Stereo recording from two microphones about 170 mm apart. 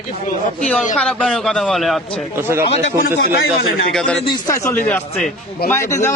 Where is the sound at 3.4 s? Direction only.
60° left (ahead or behind).